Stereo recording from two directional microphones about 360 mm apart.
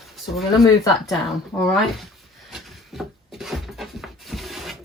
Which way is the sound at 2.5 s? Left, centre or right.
Centre.